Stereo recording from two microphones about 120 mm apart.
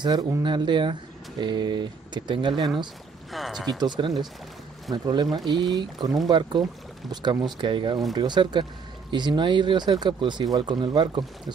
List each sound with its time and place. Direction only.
0.4 s speech: 40° right (ahead or behind)
3.3 s speech: centre (ahead or behind)
3.8 s speech: 35° right (ahead or behind)